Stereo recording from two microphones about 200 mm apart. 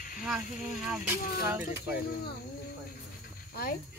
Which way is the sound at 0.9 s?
10° right (ahead or behind).